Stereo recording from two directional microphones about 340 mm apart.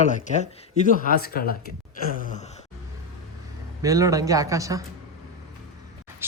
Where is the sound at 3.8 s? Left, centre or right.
Centre.